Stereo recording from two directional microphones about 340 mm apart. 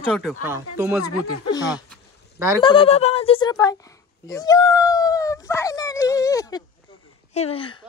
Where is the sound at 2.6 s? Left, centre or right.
Centre.